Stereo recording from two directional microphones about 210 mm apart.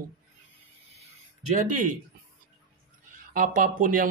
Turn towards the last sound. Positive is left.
turn(degrees=-40)  # may be behind; listen again after turning